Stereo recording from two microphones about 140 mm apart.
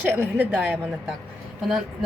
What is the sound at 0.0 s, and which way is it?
A woman's voice, 15° right (ahead or behind).